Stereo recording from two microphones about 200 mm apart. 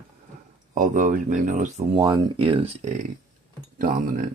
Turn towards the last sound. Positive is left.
turn(degrees=-40)  # may be behind; listen again after turning